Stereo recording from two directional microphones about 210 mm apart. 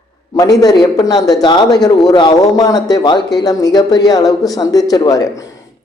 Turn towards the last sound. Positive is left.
turn(degrees=15)  # may be behind; listen again after turning